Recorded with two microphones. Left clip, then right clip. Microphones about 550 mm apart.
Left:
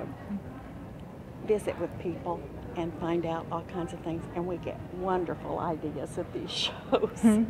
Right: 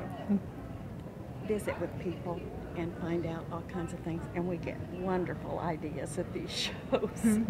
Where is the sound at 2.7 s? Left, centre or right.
Left.